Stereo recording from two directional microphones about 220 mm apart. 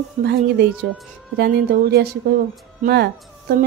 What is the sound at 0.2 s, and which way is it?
A woman's voice, 45° right (ahead or behind).